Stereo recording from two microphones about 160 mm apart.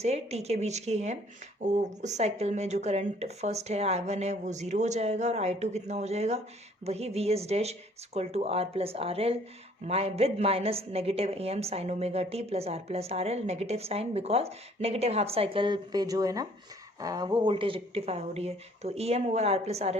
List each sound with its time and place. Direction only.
0.0 s a woman's voice: 40° right (ahead or behind)